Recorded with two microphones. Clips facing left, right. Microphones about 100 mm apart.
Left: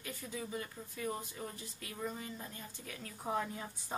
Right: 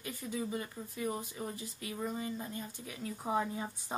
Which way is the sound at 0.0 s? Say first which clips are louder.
Right 5 dB; 20° right (ahead or behind).